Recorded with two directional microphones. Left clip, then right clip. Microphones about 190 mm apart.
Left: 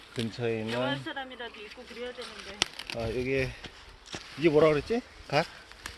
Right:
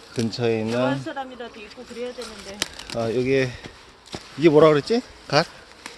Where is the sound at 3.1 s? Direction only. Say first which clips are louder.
Right 9 dB; 15° right (ahead or behind).